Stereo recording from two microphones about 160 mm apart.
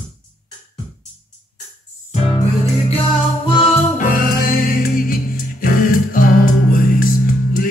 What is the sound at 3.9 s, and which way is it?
Music, 60° left (ahead or behind).